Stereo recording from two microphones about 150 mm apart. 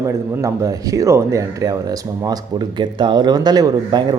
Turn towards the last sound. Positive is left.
turn(degrees=-25)  # may be behind; listen again after turning